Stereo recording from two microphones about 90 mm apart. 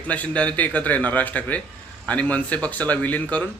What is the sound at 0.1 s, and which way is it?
A man's voice, 15° left (ahead or behind).